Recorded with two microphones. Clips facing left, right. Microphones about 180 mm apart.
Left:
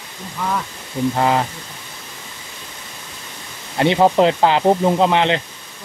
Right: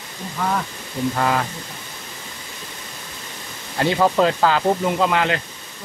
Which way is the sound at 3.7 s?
20° left (ahead or behind).